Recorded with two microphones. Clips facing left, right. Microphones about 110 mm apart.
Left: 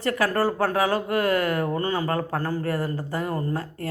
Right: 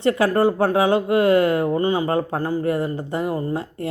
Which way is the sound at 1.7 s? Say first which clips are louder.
Right 5 dB; 15° right (ahead or behind).